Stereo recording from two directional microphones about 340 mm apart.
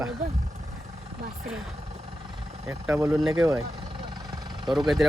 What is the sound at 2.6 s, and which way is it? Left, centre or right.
Speech, centre.